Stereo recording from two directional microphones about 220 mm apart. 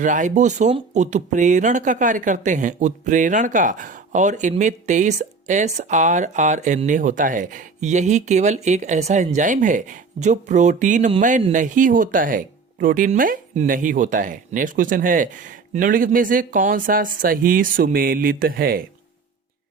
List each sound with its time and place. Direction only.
0.0 s speech: 35° right (ahead or behind)